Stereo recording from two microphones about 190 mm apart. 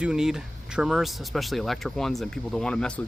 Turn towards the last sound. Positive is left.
turn(degrees=5)  # may be behind; listen again after turning